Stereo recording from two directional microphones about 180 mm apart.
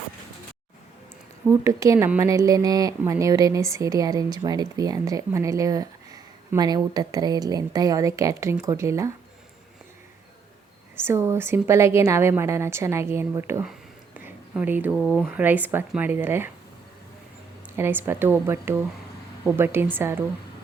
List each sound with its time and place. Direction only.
1.5 s speech: 15° right (ahead or behind)
11.0 s a woman's voice: 15° right (ahead or behind)
14.9 s speech: centre (ahead or behind)
17.7 s speech: 10° right (ahead or behind)